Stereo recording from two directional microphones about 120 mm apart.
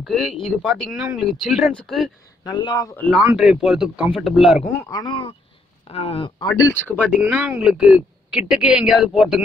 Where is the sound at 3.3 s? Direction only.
5° right (ahead or behind).